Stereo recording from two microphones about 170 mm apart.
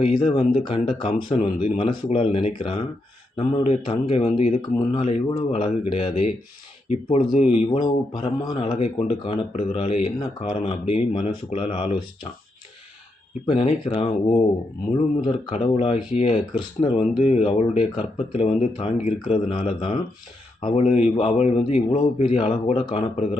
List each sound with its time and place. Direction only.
0.0 s a man's voice: 30° left (ahead or behind)
13.5 s a man's voice: 35° left (ahead or behind)
20.8 s a man's voice: 40° left (ahead or behind)